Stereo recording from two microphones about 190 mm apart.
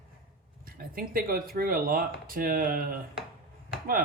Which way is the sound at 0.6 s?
50° right (ahead or behind).